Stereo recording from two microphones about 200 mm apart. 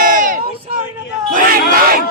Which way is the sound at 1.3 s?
45° right (ahead or behind).